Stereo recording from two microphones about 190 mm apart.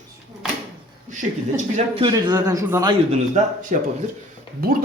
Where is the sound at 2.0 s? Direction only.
20° right (ahead or behind).